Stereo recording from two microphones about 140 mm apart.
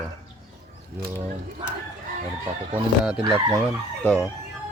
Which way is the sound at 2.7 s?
5° right (ahead or behind).